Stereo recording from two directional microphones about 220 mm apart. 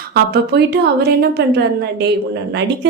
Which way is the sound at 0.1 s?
50° right (ahead or behind).